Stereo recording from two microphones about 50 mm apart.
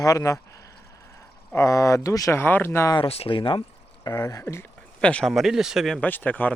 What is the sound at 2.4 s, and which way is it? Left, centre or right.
Speech, left.